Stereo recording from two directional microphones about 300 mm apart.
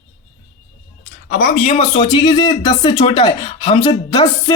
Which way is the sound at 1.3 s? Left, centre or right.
Left.